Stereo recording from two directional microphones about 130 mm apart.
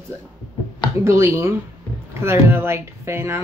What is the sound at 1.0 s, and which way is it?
Speech, 20° right (ahead or behind).